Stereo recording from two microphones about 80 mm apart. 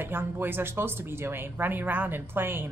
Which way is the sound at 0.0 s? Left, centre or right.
Right.